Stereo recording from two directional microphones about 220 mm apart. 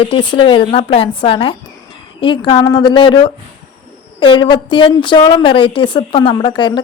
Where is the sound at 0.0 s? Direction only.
25° left (ahead or behind).